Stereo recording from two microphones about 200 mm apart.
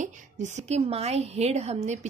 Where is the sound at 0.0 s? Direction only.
35° right (ahead or behind).